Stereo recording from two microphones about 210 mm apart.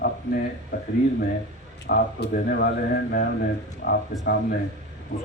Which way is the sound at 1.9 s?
50° left (ahead or behind).